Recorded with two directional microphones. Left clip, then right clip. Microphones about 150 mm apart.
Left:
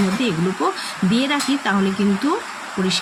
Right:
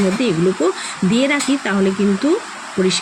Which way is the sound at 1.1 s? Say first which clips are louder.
Right 3 dB; 15° right (ahead or behind).